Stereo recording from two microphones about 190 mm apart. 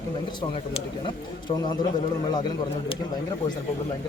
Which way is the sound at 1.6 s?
25° left (ahead or behind).